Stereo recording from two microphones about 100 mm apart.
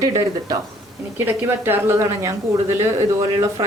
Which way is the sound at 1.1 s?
20° right (ahead or behind).